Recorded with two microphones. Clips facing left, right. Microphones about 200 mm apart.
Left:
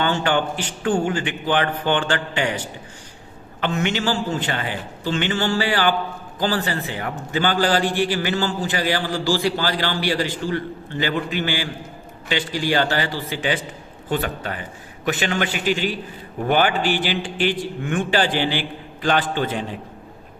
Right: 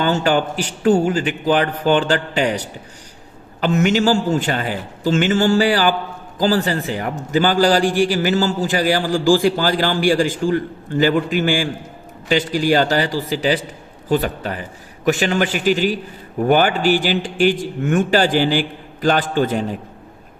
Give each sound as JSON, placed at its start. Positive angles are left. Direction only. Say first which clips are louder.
{"t": 0.0, "sound": "a man's voice", "louder": "right 3 dB", "side_deg": -40}